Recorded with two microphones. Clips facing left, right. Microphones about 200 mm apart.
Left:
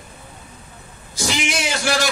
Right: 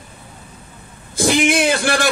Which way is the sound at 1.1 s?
55° right (ahead or behind).